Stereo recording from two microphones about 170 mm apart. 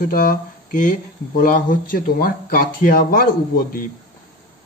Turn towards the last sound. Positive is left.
turn(degrees=60)  # may be behind; listen again after turning